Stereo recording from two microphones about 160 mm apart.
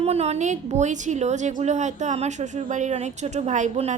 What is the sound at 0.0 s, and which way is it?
A woman's voice, 40° right (ahead or behind).